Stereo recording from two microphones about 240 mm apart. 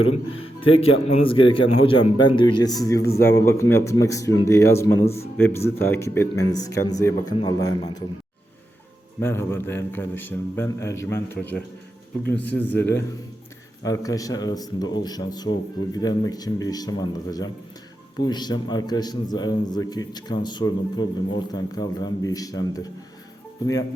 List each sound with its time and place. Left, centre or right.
0.6 s a man's voice: left
5.0 s a man's voice: left
5.4 s a man's voice: centre
9.2 s a man's voice: centre
12.3 s a man's voice: centre